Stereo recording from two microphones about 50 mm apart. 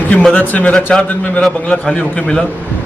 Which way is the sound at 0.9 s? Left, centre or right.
Centre.